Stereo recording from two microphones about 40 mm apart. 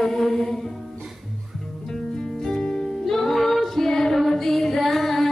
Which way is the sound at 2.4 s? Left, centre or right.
Centre.